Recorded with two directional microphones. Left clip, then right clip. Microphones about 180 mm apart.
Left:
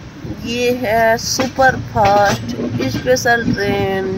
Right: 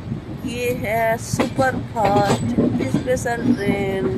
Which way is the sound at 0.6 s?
35° left (ahead or behind).